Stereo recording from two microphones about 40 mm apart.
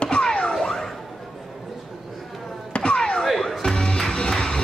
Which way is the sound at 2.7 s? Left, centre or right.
Left.